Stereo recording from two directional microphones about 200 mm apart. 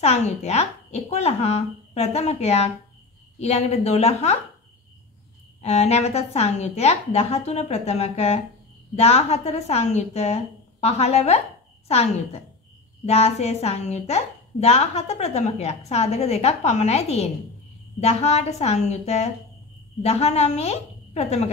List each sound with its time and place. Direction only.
0.0 s a woman's voice: 30° left (ahead or behind)
5.6 s a woman's voice: 35° left (ahead or behind)